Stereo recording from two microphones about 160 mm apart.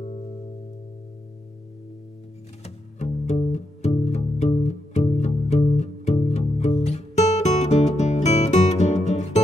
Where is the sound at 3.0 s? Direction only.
45° left (ahead or behind).